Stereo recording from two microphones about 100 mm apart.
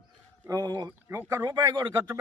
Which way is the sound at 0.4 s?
35° right (ahead or behind).